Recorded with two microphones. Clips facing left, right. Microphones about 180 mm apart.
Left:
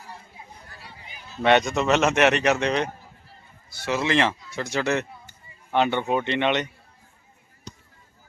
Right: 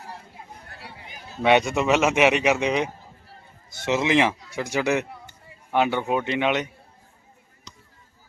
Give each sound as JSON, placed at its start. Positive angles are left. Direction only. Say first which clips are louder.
{"t": 0.7, "sound": "chatter", "louder": "right 3 dB", "side_deg": -65}
{"t": 1.4, "sound": "speech", "louder": "even", "side_deg": -10}
{"t": 3.8, "sound": "speech", "louder": "right 2 dB", "side_deg": -20}
{"t": 5.0, "sound": "a sound", "louder": "right 4 dB", "side_deg": -70}
{"t": 5.7, "sound": "speech", "louder": "even", "side_deg": -5}